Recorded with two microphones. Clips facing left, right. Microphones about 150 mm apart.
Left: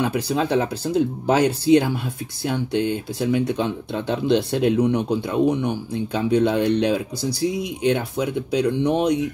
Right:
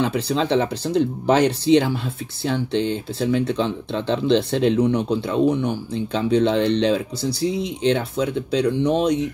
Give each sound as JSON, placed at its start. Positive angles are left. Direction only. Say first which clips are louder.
{"t": 0.0, "sound": "speech", "louder": "right 1 dB", "side_deg": 10}
{"t": 7.2, "sound": "speech", "louder": "right 1 dB", "side_deg": -25}
{"t": 7.8, "sound": "speech", "louder": "right 1 dB", "side_deg": 15}